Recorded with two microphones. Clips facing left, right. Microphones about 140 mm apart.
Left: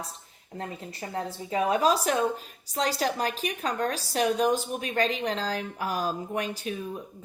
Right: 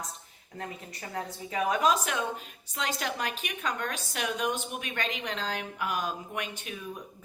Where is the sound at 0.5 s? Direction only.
30° left (ahead or behind).